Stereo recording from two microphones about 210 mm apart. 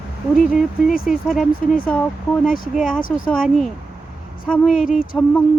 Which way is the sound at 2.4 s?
40° left (ahead or behind).